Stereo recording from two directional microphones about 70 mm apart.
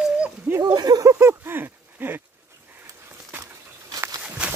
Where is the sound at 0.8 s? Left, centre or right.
Right.